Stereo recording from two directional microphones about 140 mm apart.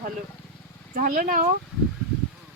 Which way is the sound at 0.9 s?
75° right (ahead or behind).